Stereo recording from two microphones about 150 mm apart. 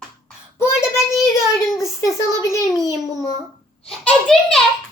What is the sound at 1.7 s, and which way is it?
A child's voice, 20° left (ahead or behind).